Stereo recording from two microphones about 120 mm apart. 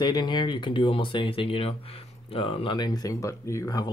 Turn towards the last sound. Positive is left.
turn(degrees=30)  # may be behind; listen again after turning